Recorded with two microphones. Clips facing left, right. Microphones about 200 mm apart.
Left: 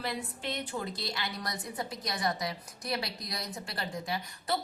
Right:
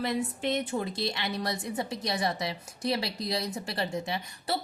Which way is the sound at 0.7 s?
25° right (ahead or behind).